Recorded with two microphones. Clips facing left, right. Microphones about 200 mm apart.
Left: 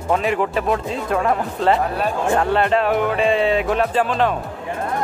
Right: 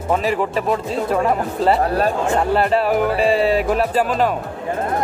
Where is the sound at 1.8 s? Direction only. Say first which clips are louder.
Right 3 dB; 40° right (ahead or behind).